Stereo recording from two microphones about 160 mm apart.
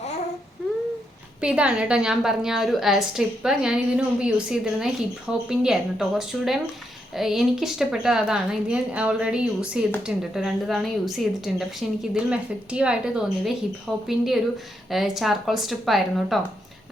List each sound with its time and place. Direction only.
1.4 s a woman's voice: 5° right (ahead or behind)